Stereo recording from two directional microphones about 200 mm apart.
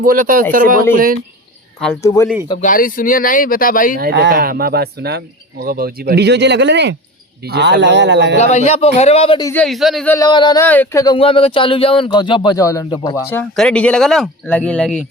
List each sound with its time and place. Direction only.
0.0 s speech: 45° right (ahead or behind)
2.0 s speech: 15° left (ahead or behind)
2.6 s speech: 40° left (ahead or behind)
3.9 s speech: 55° right (ahead or behind)
8.4 s a man's voice: 35° left (ahead or behind)
9.4 s speech: 10° left (ahead or behind)
10.1 s speech: 20° left (ahead or behind)
13.3 s speech: 5° left (ahead or behind)